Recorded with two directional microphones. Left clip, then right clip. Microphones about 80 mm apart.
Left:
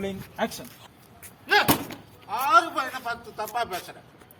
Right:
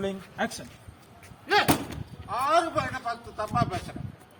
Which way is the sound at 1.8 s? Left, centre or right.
Centre.